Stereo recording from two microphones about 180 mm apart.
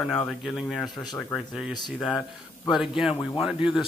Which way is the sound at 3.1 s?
25° left (ahead or behind).